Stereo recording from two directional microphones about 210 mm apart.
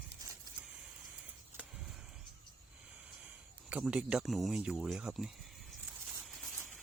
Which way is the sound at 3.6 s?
5° right (ahead or behind).